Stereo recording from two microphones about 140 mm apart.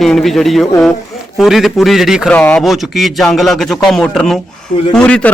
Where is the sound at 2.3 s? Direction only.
10° left (ahead or behind).